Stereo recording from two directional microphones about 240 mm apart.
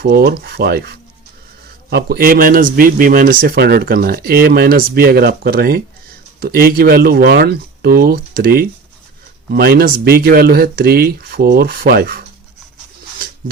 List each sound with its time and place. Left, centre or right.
0.0 s speech: right
1.9 s speech: right